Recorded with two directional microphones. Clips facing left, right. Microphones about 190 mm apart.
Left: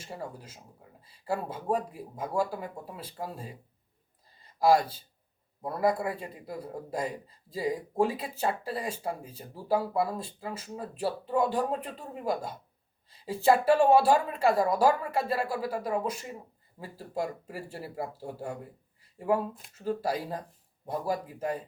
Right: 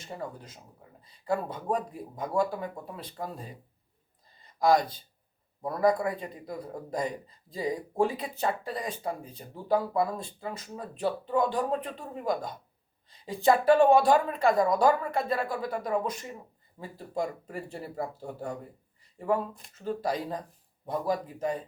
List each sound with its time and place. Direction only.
0.0 s a woman's voice: 5° left (ahead or behind)